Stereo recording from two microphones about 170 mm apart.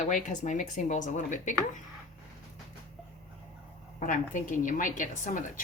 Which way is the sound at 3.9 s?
50° left (ahead or behind).